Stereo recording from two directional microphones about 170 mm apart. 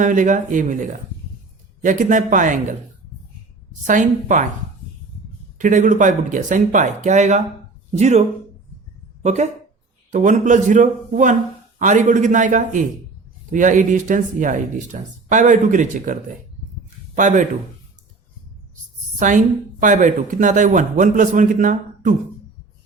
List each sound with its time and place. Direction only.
0.0 s a man's voice: 50° right (ahead or behind)
4.3 s a man's voice: 50° right (ahead or behind)
5.5 s a man's voice: 50° right (ahead or behind)
9.2 s a man's voice: 40° right (ahead or behind)
17.2 s a man's voice: 50° right (ahead or behind)
19.2 s a man's voice: 45° right (ahead or behind)